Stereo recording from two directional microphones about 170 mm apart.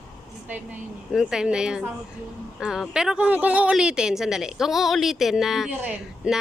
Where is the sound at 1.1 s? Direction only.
5° right (ahead or behind).